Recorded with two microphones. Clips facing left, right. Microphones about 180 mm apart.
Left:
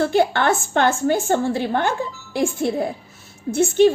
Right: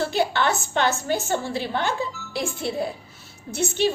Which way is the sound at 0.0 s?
55° left (ahead or behind).